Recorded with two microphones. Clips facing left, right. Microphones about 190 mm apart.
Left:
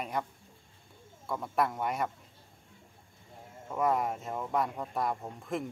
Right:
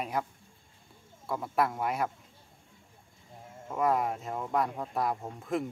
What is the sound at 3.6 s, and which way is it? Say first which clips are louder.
Speech: right 1 dB; centre (ahead or behind).